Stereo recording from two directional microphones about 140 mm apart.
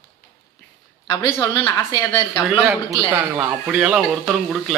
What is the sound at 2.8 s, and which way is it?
Speech, 15° right (ahead or behind).